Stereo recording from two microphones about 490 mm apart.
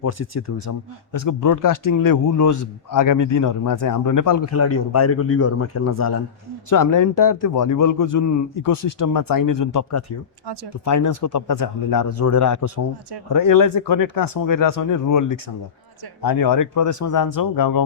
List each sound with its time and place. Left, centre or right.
0.0 s speech: left